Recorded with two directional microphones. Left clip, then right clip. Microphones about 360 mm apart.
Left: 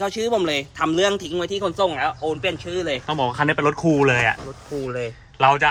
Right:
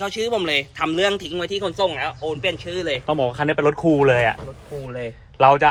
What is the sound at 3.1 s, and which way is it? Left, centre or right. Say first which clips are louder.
Speech: even; centre.